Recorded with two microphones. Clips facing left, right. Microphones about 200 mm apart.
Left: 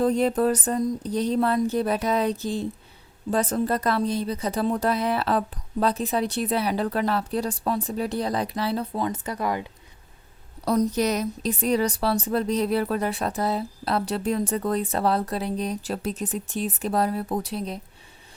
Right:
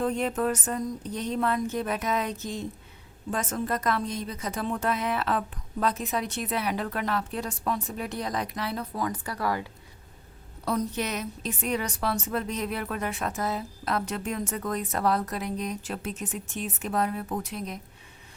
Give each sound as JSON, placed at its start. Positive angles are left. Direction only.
{"t": 0.0, "sound": "a woman's voice", "side_deg": 35}
{"t": 10.7, "sound": "a woman's voice", "side_deg": 40}